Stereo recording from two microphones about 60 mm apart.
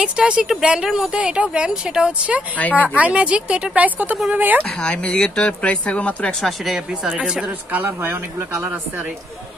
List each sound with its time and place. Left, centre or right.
0.0 s speech: centre
2.5 s speech: left
3.0 s speech: centre
4.6 s speech: centre
6.4 s speech: centre
7.7 s speech: right